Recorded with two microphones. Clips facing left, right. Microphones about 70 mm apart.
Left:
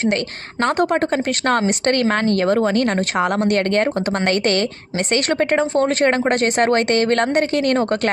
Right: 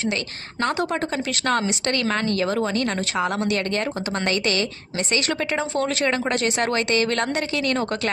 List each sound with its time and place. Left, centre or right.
0.0 s speech: left